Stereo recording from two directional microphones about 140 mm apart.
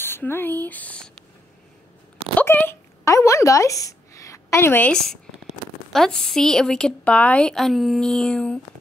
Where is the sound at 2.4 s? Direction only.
15° left (ahead or behind).